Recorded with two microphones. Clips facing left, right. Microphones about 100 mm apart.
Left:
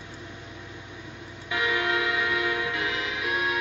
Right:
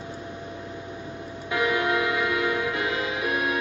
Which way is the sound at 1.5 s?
40° right (ahead or behind).